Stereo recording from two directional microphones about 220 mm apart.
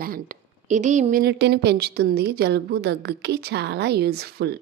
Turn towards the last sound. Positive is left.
turn(degrees=-45)  # may be behind; listen again after turning